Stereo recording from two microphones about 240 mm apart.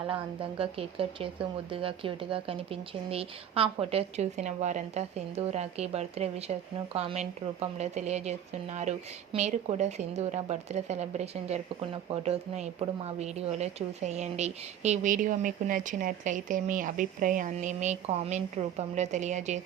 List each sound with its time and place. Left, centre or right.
0.6 s speech: right